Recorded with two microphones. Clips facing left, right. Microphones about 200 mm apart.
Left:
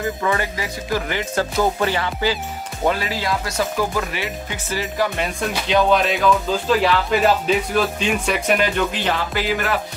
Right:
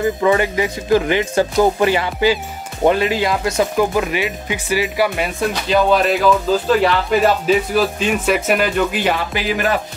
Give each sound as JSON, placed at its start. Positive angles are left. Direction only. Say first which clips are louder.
{"t": 0.2, "sound": "speech", "louder": "right 7 dB", "side_deg": -20}